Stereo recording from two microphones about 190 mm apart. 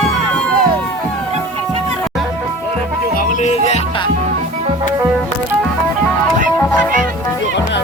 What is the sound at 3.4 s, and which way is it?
Music, 35° left (ahead or behind).